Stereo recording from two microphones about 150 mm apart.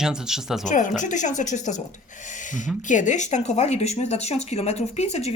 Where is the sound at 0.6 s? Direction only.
60° left (ahead or behind).